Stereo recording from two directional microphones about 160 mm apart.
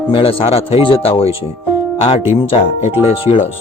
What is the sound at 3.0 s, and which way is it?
Speech, 35° left (ahead or behind).